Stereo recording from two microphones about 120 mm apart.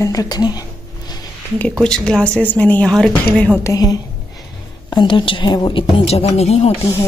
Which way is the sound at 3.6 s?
30° left (ahead or behind).